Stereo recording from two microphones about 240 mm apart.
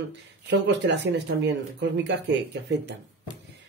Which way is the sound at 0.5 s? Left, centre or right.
Right.